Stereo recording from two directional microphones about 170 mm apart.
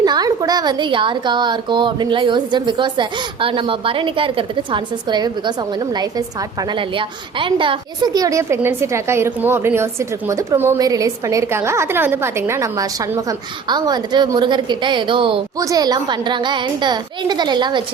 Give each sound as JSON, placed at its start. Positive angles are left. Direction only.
{"t": 0.0, "sound": "a woman's voice", "side_deg": -25}